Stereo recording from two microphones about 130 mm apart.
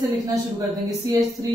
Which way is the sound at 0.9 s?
25° right (ahead or behind).